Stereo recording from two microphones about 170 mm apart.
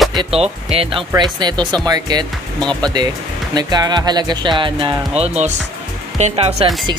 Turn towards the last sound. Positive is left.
turn(degrees=-40)  # may be behind; listen again after turning